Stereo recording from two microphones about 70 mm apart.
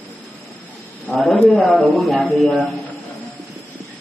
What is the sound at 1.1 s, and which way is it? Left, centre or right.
Speech, centre.